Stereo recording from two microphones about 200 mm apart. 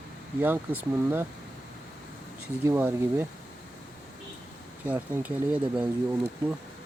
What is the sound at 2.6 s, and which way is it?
Speech, 10° right (ahead or behind).